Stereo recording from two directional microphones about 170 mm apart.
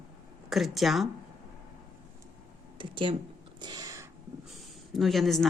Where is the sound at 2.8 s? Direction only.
30° right (ahead or behind).